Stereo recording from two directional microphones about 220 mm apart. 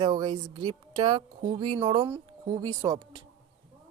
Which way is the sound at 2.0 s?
15° right (ahead or behind).